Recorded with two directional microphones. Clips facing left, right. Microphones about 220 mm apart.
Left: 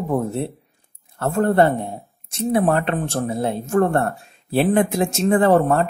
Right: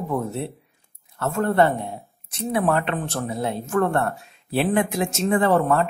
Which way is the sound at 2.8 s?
45° left (ahead or behind).